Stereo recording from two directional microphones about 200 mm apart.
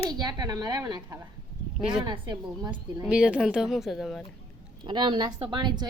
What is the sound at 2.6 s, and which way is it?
Speech, 5° right (ahead or behind).